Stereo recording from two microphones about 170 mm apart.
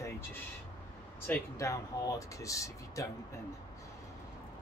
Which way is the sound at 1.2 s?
15° left (ahead or behind).